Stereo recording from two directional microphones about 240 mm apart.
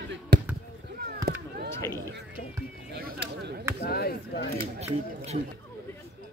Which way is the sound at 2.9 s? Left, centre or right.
Right.